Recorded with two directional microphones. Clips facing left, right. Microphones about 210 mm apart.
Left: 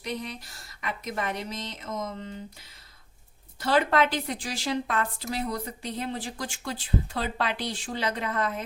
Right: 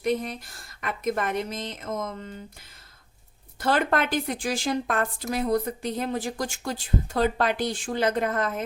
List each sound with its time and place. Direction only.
0.0 s a woman's voice: 50° right (ahead or behind)
3.6 s a woman's voice: 50° right (ahead or behind)